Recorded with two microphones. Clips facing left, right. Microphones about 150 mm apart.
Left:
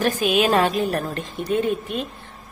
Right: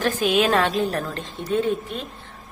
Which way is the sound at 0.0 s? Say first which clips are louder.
Left 1 dB; 15° left (ahead or behind).